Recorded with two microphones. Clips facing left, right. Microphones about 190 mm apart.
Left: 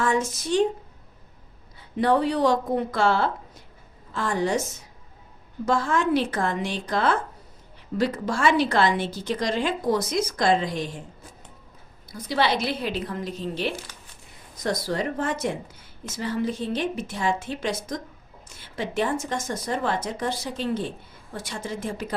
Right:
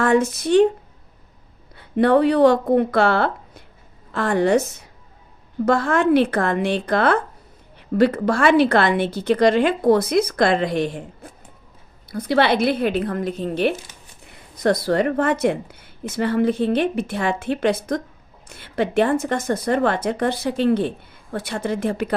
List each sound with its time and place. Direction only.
0.0 s a woman's voice: 60° right (ahead or behind)
1.7 s a woman's voice: 60° right (ahead or behind)